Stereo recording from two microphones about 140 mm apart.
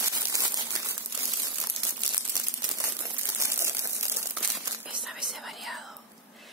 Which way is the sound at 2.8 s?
20° right (ahead or behind).